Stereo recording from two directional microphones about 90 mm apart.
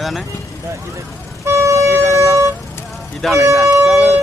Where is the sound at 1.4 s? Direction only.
35° right (ahead or behind).